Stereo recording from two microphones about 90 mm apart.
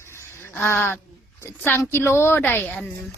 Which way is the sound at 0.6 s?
25° left (ahead or behind).